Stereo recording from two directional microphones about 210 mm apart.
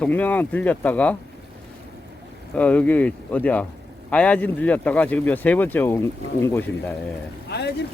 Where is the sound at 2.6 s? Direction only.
5° left (ahead or behind).